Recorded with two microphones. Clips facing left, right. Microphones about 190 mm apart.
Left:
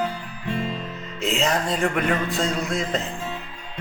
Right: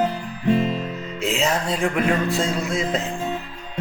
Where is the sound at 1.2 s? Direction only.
Centre (ahead or behind).